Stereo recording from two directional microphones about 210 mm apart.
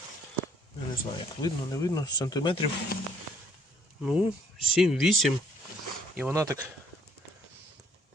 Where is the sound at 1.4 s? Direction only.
15° left (ahead or behind).